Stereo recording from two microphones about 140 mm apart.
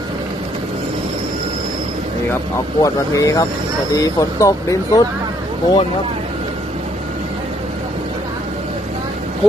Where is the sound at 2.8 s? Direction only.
25° left (ahead or behind).